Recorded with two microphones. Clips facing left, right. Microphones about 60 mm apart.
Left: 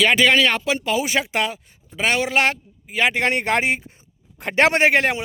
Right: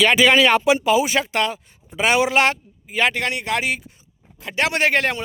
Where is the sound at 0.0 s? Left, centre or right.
Centre.